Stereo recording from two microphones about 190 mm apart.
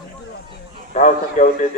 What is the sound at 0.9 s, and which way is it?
Speech, 40° left (ahead or behind).